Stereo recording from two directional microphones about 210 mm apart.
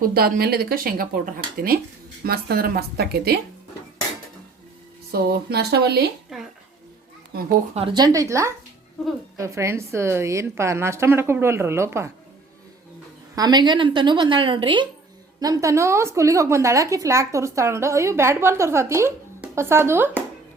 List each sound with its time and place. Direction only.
0.1 s speech: 45° right (ahead or behind)
5.1 s speech: 50° right (ahead or behind)
7.7 s a woman's voice: 25° right (ahead or behind)
9.0 s speech: centre (ahead or behind)
9.4 s a woman's voice: 15° right (ahead or behind)
13.3 s a woman's voice: 20° right (ahead or behind)